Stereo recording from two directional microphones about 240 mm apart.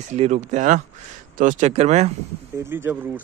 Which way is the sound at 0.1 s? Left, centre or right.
Right.